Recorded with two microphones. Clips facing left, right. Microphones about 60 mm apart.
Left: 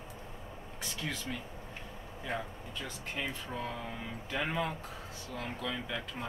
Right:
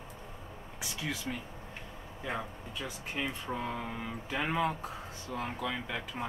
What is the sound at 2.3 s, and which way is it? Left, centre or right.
Speech, centre.